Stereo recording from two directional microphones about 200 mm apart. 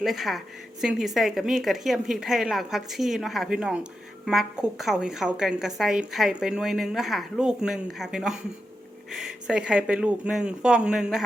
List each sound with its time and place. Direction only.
0.0 s a woman's voice: centre (ahead or behind)